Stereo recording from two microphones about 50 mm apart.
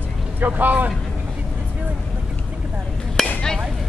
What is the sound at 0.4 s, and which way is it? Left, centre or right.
Speech, right.